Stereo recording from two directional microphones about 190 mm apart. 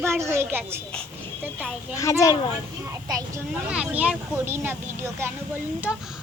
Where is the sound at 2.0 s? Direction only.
15° left (ahead or behind).